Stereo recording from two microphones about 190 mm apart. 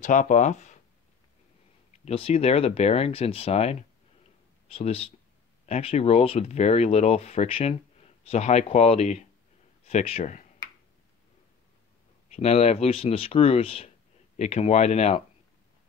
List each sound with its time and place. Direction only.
0.0 s speech: 40° left (ahead or behind)
2.0 s speech: 30° left (ahead or behind)
12.4 s speech: 35° left (ahead or behind)